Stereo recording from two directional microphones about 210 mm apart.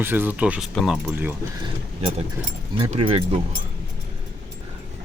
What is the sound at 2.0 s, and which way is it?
Speech, 30° right (ahead or behind).